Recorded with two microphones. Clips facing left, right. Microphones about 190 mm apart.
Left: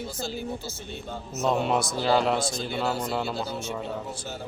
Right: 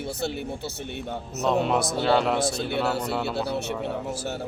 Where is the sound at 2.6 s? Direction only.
65° right (ahead or behind).